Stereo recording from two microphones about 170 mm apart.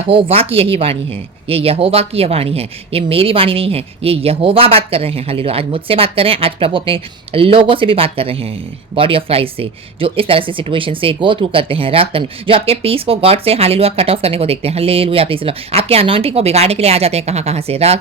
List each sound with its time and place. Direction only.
0.1 s speech: 35° right (ahead or behind)